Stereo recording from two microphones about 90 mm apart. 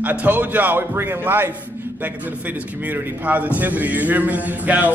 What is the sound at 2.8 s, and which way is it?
A man's voice, 20° right (ahead or behind).